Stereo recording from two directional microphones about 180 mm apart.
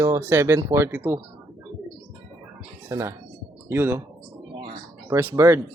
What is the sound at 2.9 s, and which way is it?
Speech, 15° right (ahead or behind).